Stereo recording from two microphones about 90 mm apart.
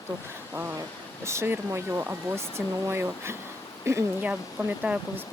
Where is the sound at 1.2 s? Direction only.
30° right (ahead or behind).